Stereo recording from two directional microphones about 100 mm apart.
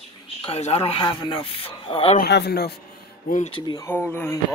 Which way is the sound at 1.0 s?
50° left (ahead or behind).